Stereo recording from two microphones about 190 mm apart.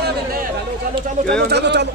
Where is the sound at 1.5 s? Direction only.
65° right (ahead or behind).